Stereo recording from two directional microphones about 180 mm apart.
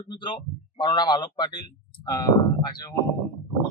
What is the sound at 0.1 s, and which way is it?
Speech, 25° left (ahead or behind).